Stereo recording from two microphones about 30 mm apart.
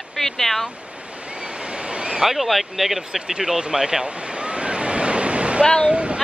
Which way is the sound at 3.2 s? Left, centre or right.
Right.